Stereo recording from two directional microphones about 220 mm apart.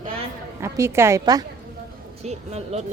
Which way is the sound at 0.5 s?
10° right (ahead or behind).